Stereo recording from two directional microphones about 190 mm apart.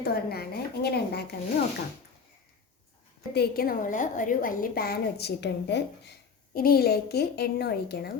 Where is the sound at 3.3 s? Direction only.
55° left (ahead or behind).